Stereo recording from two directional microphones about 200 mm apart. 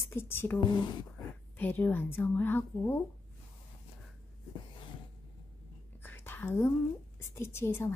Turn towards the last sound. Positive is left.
turn(degrees=10)  # may be behind; listen again after turning